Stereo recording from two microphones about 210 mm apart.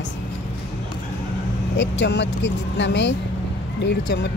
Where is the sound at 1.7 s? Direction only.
55° left (ahead or behind).